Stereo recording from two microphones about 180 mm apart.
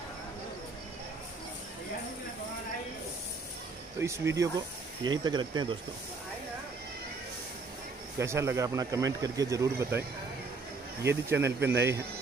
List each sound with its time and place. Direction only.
4.0 s speech: 15° right (ahead or behind)
8.2 s speech: 15° right (ahead or behind)
11.3 s speech: 75° right (ahead or behind)
11.7 s speech: 15° right (ahead or behind)